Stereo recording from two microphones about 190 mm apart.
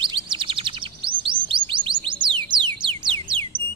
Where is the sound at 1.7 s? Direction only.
25° right (ahead or behind).